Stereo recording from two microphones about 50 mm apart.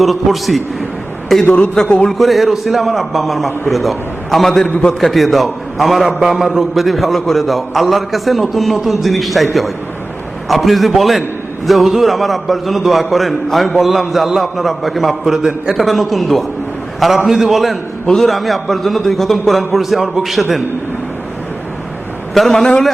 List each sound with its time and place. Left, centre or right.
0.0 s a man's voice: centre
1.5 s a man's voice: left
2.0 s a man's voice: centre
22.4 s a man's voice: centre